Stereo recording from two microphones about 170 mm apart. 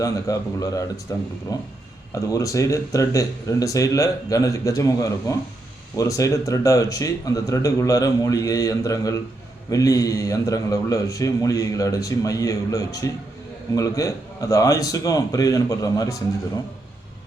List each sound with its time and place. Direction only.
0.0 s a man's voice: 20° left (ahead or behind)